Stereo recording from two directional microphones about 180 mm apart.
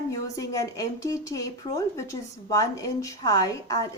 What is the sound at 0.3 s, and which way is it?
A woman's voice, 20° left (ahead or behind).